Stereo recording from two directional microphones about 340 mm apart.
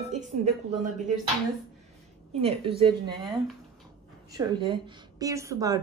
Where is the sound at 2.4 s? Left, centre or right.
Centre.